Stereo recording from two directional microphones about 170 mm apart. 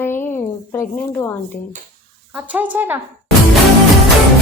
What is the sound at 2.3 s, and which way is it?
Speech, 10° right (ahead or behind).